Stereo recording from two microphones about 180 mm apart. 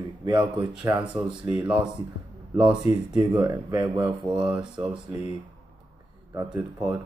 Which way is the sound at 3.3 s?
20° right (ahead or behind).